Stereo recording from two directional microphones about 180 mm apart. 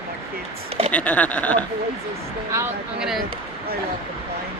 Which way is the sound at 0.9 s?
10° left (ahead or behind).